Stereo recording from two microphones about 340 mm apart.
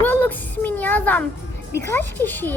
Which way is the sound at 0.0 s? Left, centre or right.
Centre.